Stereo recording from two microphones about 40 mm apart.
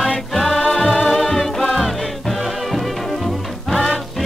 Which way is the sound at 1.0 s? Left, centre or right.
Centre.